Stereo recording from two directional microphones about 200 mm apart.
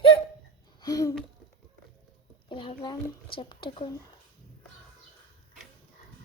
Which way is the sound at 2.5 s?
25° left (ahead or behind).